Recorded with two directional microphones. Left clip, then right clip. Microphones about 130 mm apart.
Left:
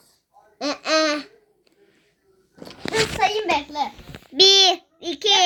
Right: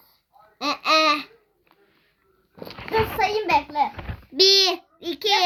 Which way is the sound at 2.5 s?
40° right (ahead or behind).